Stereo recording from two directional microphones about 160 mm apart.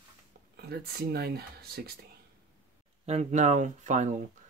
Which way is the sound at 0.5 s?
75° right (ahead or behind).